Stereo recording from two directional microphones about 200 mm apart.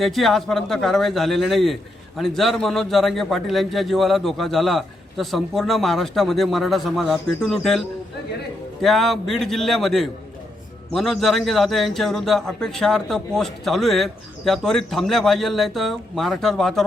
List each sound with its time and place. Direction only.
0.0 s a man's voice: centre (ahead or behind)